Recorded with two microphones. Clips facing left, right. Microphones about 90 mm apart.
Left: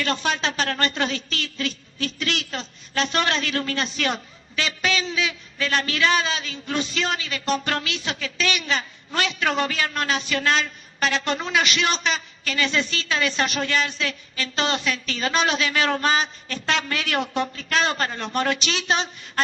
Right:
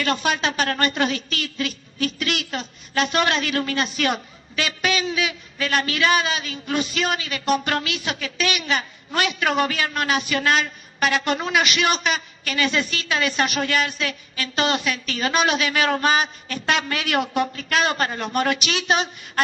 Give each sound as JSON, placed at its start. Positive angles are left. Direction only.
{"t": 0.0, "sound": "a woman's voice", "side_deg": -10}